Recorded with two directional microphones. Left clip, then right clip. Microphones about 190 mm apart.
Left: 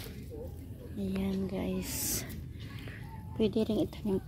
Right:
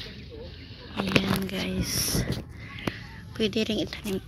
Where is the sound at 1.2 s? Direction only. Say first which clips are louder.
Right 7 dB; 10° left (ahead or behind).